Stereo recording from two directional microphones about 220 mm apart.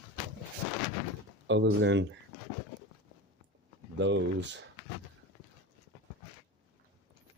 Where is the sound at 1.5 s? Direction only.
55° right (ahead or behind).